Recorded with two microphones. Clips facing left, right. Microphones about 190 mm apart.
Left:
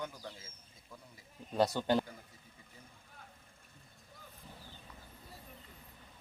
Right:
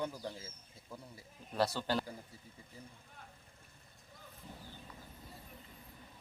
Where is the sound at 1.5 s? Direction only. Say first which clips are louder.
Left 4 dB; 15° left (ahead or behind).